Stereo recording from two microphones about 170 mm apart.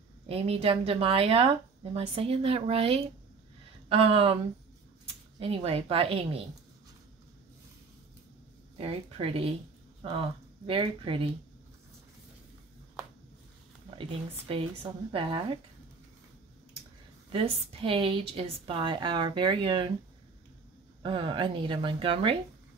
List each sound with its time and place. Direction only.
0.3 s speech: 35° right (ahead or behind)
5.4 s speech: 35° right (ahead or behind)
8.7 s speech: 35° right (ahead or behind)
14.5 s speech: 35° right (ahead or behind)
17.3 s speech: 30° right (ahead or behind)
21.0 s a woman's voice: 30° right (ahead or behind)